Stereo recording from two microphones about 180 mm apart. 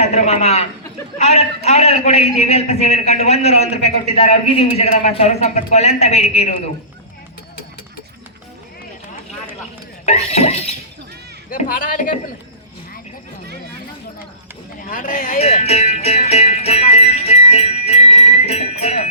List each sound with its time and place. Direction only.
0.0 s a man's voice: 40° left (ahead or behind)
10.1 s speech: 35° left (ahead or behind)
11.4 s a man's voice: 50° left (ahead or behind)
14.8 s speech: 50° left (ahead or behind)